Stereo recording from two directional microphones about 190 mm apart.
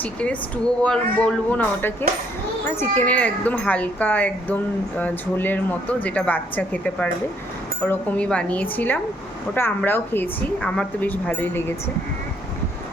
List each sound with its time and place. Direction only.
0.0 s speech: 5° left (ahead or behind)